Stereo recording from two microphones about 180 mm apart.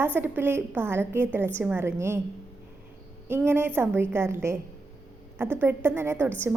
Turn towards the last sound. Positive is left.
turn(degrees=-10)  # may be behind; listen again after turning